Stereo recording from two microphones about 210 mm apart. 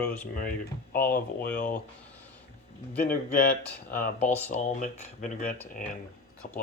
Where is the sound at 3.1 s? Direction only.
45° left (ahead or behind).